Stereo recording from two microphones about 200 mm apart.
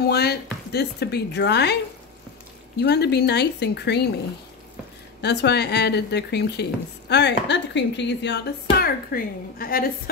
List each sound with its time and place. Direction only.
0.0 s speech: 55° left (ahead or behind)
2.8 s speech: 55° left (ahead or behind)
5.2 s speech: 55° left (ahead or behind)
8.8 s a woman's voice: 45° left (ahead or behind)